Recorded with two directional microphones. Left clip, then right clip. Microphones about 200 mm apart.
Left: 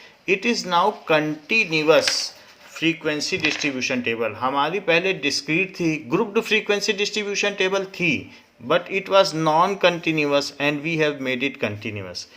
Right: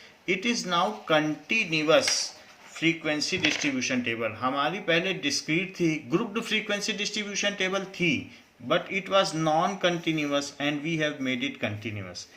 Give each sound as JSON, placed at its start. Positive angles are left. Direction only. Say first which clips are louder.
{"t": 0.3, "sound": "speech", "louder": "left 6 dB", "side_deg": 35}